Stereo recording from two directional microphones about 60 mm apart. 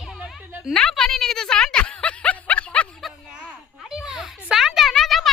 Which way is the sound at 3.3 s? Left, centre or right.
Centre.